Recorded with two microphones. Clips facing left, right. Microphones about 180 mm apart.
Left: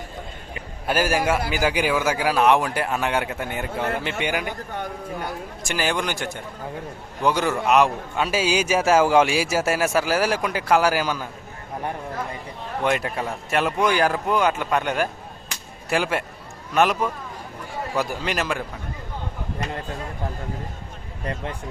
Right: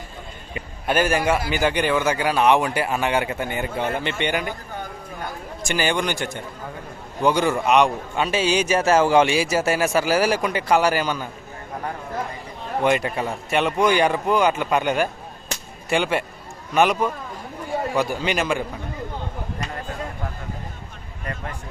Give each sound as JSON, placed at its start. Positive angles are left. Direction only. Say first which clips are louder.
{"t": 0.9, "sound": "a man's voice", "louder": "right 1 dB", "side_deg": 5}
{"t": 5.6, "sound": "a man's voice", "louder": "right 2 dB", "side_deg": 0}
{"t": 12.8, "sound": "a man's voice", "louder": "right 3 dB", "side_deg": 0}